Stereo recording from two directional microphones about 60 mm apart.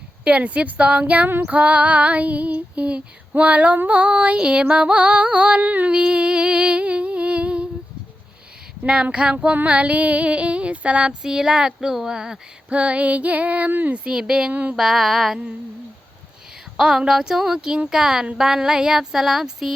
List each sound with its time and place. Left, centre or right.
0.3 s female singing: right
8.8 s female singing: right
13.9 s speech: centre
14.5 s female singing: right
14.8 s a sound: centre
16.7 s speech: centre